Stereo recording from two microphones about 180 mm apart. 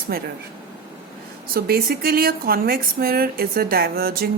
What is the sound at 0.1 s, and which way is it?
Speech, 55° right (ahead or behind).